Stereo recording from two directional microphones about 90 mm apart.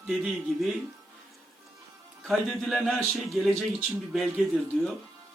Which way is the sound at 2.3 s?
Centre (ahead or behind).